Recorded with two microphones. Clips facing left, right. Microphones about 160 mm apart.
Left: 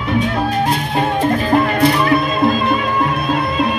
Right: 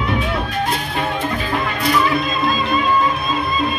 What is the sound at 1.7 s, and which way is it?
Music, 60° left (ahead or behind).